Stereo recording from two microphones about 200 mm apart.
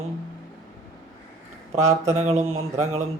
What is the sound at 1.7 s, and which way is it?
Speech, 35° right (ahead or behind).